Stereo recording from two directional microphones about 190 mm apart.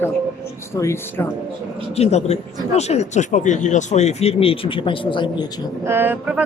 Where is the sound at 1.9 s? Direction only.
35° left (ahead or behind).